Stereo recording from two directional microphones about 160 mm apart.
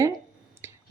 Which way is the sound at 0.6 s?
15° right (ahead or behind).